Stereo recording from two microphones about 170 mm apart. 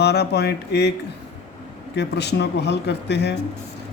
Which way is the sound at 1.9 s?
85° left.